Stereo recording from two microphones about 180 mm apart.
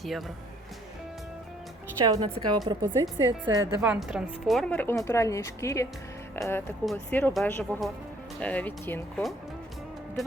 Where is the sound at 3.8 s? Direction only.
5° right (ahead or behind); by 9.0 s 10° left (ahead or behind).